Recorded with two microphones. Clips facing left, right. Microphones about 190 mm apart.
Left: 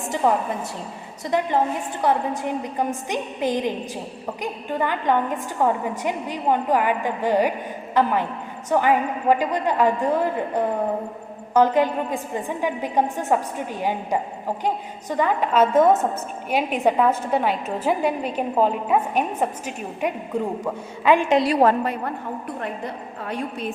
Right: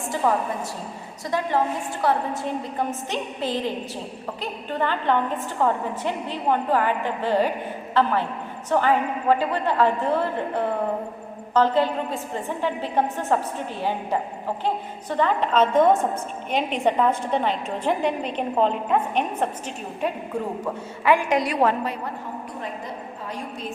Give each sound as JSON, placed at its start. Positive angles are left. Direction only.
{"t": 1.3, "sound": "a woman's voice", "side_deg": 20}
{"t": 21.0, "sound": "a woman's voice", "side_deg": 20}
{"t": 23.2, "sound": "a woman's voice", "side_deg": 60}